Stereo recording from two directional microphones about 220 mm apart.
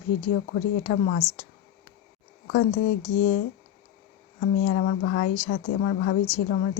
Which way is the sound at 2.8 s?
90° left.